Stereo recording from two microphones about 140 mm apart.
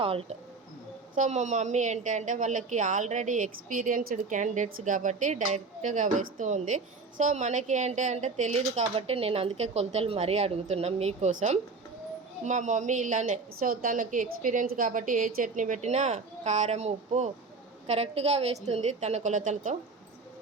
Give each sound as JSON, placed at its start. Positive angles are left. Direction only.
{"t": 0.0, "sound": "a woman's voice", "side_deg": -45}
{"t": 1.1, "sound": "a woman's voice", "side_deg": -60}